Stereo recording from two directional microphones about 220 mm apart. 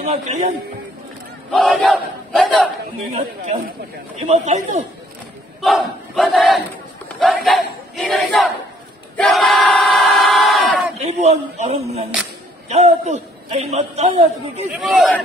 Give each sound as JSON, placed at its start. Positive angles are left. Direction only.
{"t": 0.0, "sound": "speech", "side_deg": -30}
{"t": 1.5, "sound": "battle cry", "side_deg": 0}
{"t": 3.1, "sound": "speech", "side_deg": -35}
{"t": 5.6, "sound": "battle cry", "side_deg": 0}
{"t": 7.2, "sound": "a sound", "side_deg": 0}
{"t": 8.1, "sound": "battle cry", "side_deg": 0}
{"t": 9.1, "sound": "crowd", "side_deg": 0}
{"t": 11.0, "sound": "a sound", "side_deg": -30}
{"t": 12.6, "sound": "a man's voice", "side_deg": -30}
{"t": 14.7, "sound": "battle cry", "side_deg": -5}